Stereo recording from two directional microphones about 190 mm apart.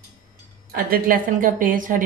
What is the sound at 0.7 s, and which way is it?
A woman's voice, 50° right (ahead or behind).